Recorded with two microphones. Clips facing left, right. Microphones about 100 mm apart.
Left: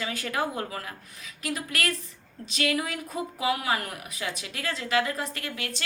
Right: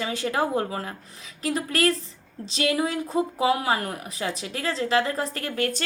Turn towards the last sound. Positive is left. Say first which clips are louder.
# right 8 dB
turn(degrees=-45)  # may be behind; listen again after turning